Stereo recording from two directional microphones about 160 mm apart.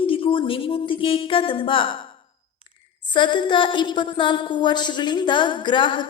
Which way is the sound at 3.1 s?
30° left (ahead or behind).